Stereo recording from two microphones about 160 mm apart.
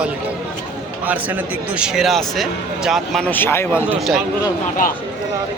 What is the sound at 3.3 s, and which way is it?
Speech, 15° left (ahead or behind).